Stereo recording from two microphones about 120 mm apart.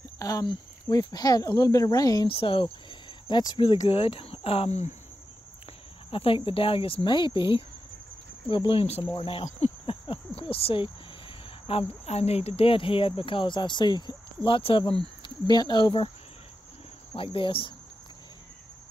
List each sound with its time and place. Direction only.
0.2 s speech: 30° left (ahead or behind)
2.2 s speech: 45° left (ahead or behind); by 4.9 s 65° left (ahead or behind)
6.0 s speech: 50° left (ahead or behind)
15.2 s speech: 35° left (ahead or behind)
17.1 s speech: 45° left (ahead or behind)